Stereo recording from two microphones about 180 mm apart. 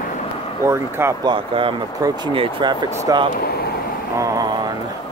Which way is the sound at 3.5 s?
60° left (ahead or behind).